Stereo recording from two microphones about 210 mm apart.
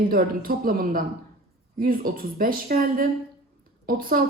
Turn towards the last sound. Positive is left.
turn(degrees=-40)  # may be behind; listen again after turning